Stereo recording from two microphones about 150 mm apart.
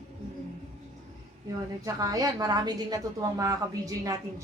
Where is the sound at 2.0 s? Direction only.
25° right (ahead or behind).